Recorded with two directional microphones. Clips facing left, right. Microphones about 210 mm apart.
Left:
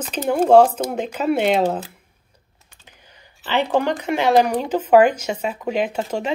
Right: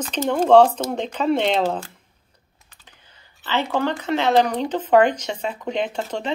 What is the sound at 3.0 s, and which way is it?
Speech, 15° left (ahead or behind).